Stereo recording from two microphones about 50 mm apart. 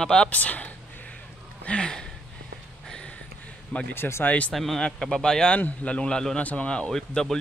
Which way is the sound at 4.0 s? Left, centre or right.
Left.